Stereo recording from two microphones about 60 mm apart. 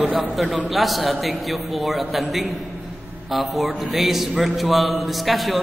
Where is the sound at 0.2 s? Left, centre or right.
Centre.